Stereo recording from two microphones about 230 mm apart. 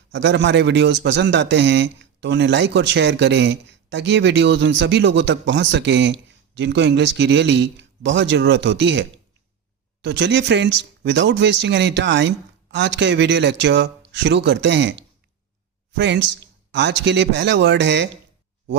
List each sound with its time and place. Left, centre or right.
0.1 s a man's voice: right